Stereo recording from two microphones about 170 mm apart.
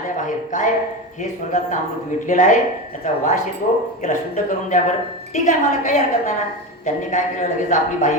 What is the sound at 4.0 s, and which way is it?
A woman's voice, 45° left (ahead or behind).